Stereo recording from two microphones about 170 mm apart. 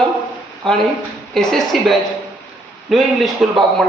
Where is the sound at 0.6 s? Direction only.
5° left (ahead or behind).